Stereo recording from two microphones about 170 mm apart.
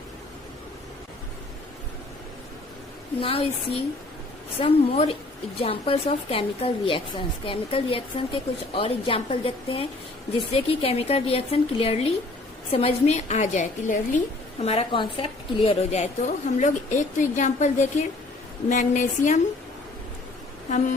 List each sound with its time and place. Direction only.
3.2 s a woman's voice: 35° left (ahead or behind)
4.6 s a woman's voice: 35° left (ahead or behind)
14.6 s a woman's voice: 35° left (ahead or behind)
20.7 s a woman's voice: 45° left (ahead or behind)